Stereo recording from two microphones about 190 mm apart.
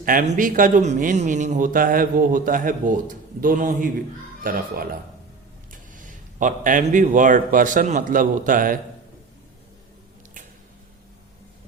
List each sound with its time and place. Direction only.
0.0 s a man's voice: 45° right (ahead or behind)